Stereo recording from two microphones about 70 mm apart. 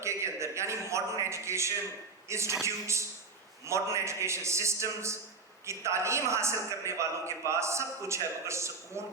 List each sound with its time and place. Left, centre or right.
0.0 s a man's voice: right